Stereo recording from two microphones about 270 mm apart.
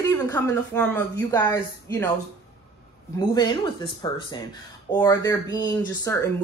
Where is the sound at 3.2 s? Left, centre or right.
Centre.